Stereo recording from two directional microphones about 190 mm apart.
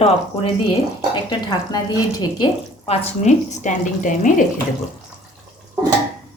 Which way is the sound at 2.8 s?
30° left (ahead or behind).